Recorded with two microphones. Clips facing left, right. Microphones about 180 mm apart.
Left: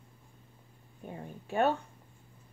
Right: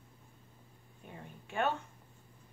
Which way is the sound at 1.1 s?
35° left (ahead or behind).